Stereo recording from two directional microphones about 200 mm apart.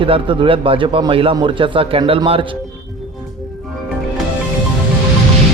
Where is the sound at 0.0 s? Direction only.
25° right (ahead or behind).